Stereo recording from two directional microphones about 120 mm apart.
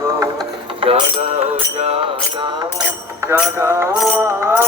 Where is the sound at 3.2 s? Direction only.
20° right (ahead or behind).